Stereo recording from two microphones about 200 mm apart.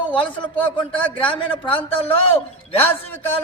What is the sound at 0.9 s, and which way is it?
Speech, 5° left (ahead or behind).